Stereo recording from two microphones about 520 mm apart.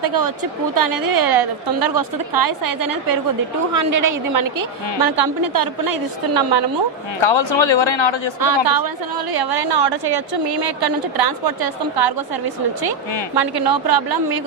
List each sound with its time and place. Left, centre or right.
0.0 s a woman's voice: right
7.2 s a man's voice: left
8.4 s a woman's voice: right